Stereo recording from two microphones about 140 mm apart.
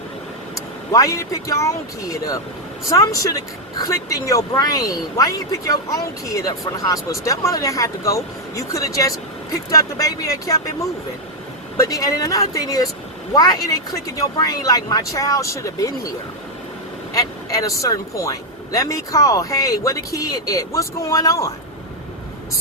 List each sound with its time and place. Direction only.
0.9 s speech: 20° left (ahead or behind)
17.2 s speech: 25° left (ahead or behind)